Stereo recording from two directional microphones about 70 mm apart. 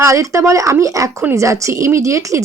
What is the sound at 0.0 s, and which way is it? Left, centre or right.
Speech, right.